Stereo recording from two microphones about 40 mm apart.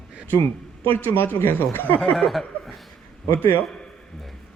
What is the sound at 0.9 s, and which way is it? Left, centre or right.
Speech, left.